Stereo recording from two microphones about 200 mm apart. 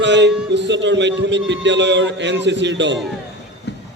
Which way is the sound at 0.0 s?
60° right (ahead or behind).